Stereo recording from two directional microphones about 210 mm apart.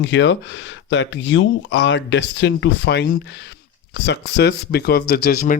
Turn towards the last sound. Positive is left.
turn(degrees=45)  # may be behind; listen again after turning